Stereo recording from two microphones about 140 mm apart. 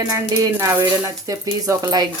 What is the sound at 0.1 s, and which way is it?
Speech, 20° right (ahead or behind).